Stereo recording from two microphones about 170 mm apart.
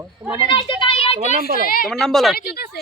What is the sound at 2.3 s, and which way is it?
Speech, 70° left (ahead or behind).